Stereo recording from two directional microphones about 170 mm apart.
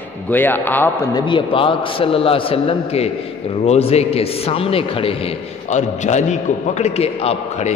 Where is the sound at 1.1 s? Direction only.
25° left (ahead or behind).